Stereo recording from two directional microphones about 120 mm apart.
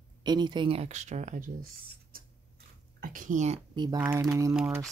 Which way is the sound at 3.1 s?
90° right.